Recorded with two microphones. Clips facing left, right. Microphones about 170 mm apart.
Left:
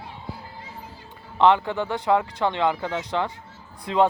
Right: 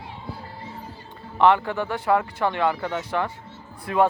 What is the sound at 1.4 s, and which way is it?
Speech, 20° left (ahead or behind).